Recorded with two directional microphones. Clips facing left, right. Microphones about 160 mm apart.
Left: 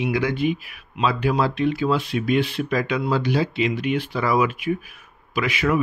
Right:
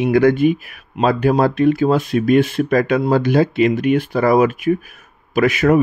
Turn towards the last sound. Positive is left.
turn(degrees=-45)  # may be behind; listen again after turning